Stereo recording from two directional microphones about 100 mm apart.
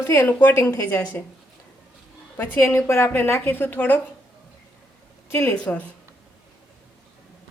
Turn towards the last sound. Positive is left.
turn(degrees=15)  # may be behind; listen again after turning